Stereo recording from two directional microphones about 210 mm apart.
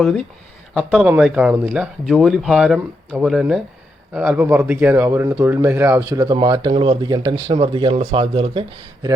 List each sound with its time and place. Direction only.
0.7 s a man's voice: 5° right (ahead or behind); by 8.6 s 25° right (ahead or behind)